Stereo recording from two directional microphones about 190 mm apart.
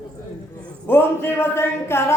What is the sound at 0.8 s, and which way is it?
A woman's voice, 10° left (ahead or behind).